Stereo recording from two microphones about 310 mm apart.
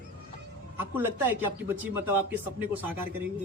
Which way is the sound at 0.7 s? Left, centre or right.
Centre.